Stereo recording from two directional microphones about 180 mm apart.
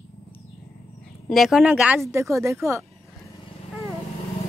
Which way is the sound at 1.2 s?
Centre (ahead or behind).